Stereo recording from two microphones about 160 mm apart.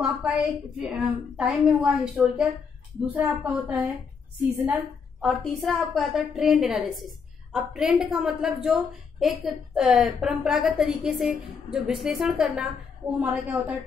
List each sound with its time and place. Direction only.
0.0 s a woman's voice: 5° right (ahead or behind)
5.2 s a woman's voice: centre (ahead or behind)